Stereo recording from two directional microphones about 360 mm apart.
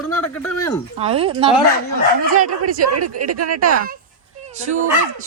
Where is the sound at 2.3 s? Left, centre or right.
Right.